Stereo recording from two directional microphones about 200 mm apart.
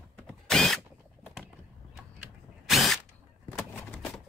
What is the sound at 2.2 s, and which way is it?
Drill, centre (ahead or behind).